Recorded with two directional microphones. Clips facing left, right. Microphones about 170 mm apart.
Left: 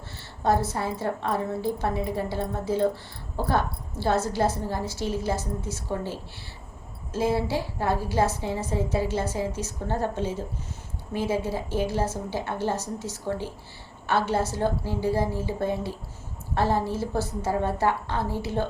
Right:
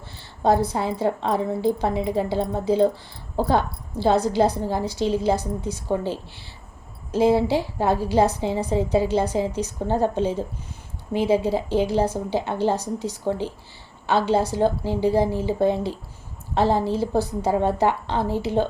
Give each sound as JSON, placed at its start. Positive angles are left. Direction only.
{"t": 0.4, "sound": "a woman's voice", "side_deg": -15}
{"t": 4.0, "sound": "a woman's voice", "side_deg": -15}